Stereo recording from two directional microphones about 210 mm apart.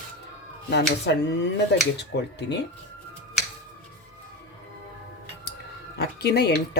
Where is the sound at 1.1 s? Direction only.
55° left (ahead or behind).